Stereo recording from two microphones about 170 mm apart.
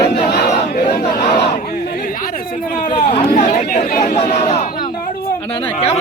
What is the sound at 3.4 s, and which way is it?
Chatter, 45° left (ahead or behind).